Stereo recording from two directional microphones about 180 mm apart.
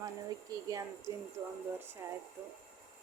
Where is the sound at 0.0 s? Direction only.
20° right (ahead or behind).